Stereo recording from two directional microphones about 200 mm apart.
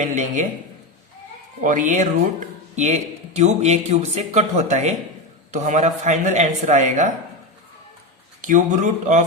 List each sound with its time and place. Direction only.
0.0 s speech: 40° right (ahead or behind)
1.6 s speech: 40° right (ahead or behind)
8.4 s speech: 40° right (ahead or behind)